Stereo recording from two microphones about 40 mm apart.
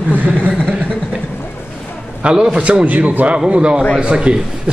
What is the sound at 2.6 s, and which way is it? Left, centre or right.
A man's voice, right.